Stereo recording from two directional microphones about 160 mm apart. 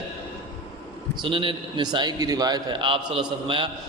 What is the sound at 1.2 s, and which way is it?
A man's voice, 30° right (ahead or behind).